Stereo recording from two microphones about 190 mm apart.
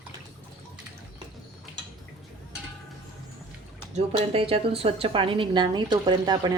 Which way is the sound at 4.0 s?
30° right (ahead or behind).